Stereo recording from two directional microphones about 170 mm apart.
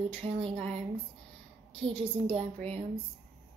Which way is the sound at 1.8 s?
30° right (ahead or behind).